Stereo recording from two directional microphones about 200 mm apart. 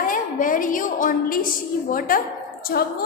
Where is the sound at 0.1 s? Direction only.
40° left (ahead or behind).